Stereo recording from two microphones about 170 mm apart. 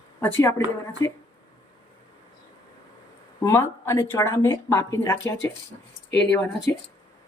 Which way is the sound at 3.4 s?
15° left (ahead or behind).